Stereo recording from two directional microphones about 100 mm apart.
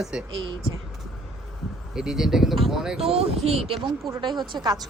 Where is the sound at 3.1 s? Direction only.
90° right.